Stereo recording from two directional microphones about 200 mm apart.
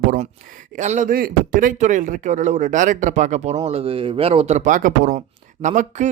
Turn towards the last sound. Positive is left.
turn(degrees=-40)  # may be behind; listen again after turning